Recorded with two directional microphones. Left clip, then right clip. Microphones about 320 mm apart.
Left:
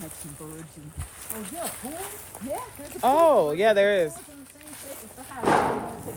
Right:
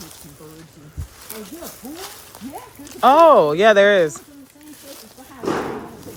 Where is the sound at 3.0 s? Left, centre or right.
Right.